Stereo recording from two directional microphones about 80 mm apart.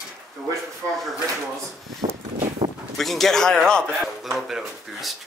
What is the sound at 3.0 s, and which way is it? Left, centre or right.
Speech, centre.